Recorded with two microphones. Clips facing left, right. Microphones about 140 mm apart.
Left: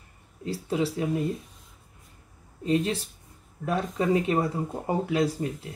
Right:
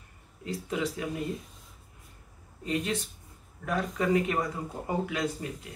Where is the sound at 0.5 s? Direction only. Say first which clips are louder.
Left 4 dB; 30° left (ahead or behind).